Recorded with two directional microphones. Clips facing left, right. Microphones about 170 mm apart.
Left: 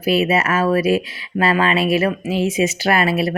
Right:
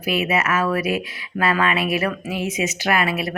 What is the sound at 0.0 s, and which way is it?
Speech, 30° left (ahead or behind).